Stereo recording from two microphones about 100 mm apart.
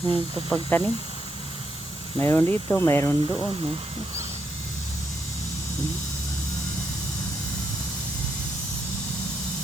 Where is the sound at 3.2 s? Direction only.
55° right (ahead or behind).